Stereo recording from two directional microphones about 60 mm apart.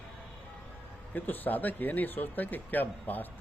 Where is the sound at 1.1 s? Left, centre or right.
Left.